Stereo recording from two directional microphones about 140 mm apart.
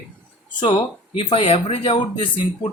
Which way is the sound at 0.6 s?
35° left (ahead or behind).